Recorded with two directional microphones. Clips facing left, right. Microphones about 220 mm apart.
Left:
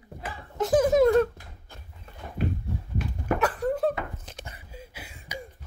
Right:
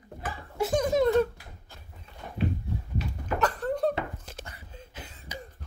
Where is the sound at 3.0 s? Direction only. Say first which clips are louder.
Left 3 dB; 50° left (ahead or behind).